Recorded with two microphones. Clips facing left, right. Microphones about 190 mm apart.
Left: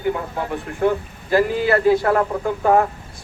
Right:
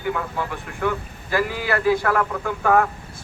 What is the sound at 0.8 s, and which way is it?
A man's voice, 30° left (ahead or behind).